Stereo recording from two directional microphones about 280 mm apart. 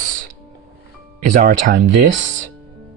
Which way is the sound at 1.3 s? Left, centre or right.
Right.